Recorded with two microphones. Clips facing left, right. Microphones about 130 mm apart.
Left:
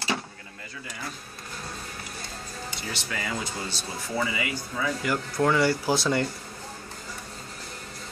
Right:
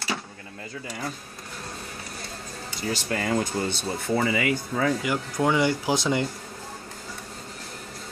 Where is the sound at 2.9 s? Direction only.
45° right (ahead or behind).